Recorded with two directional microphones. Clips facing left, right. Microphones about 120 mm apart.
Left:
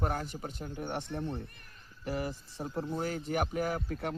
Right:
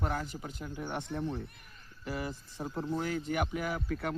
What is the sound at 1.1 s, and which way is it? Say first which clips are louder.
Speech: right 1 dB; 5° right (ahead or behind).